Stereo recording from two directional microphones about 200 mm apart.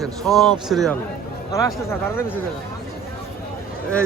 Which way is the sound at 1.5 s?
15° left (ahead or behind).